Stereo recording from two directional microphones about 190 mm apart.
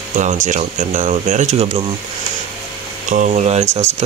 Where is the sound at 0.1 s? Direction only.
40° right (ahead or behind).